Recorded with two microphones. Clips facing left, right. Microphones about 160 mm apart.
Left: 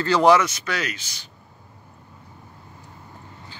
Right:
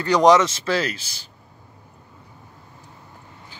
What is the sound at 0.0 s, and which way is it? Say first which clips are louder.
Speech: right 2 dB; 15° right (ahead or behind).